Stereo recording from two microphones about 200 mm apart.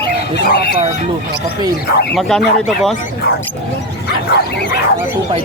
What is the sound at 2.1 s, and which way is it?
Speech, centre (ahead or behind).